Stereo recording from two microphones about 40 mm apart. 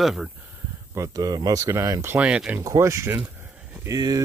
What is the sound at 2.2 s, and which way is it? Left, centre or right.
Speech, right.